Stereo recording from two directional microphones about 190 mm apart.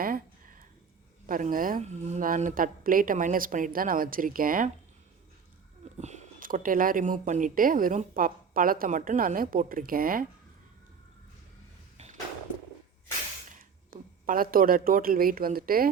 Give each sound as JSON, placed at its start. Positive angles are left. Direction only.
{"t": 0.0, "sound": "a sound", "side_deg": -45}
{"t": 1.3, "sound": "speech", "side_deg": -45}
{"t": 6.0, "sound": "speech", "side_deg": -35}
{"t": 13.6, "sound": "speech", "side_deg": -50}